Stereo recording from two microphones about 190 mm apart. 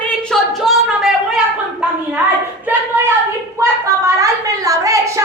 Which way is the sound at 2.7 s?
10° right (ahead or behind).